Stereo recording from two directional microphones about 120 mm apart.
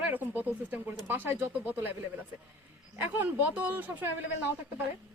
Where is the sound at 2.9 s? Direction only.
15° right (ahead or behind).